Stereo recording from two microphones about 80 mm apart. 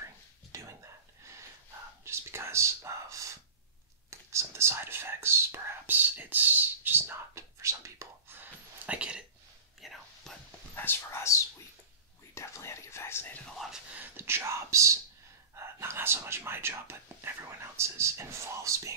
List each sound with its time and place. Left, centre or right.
0.5 s whispering: right
2.0 s whispering: right
4.1 s speech: right
8.8 s speech: centre
9.8 s whispering: centre
10.7 s speech: left
13.9 s speech: right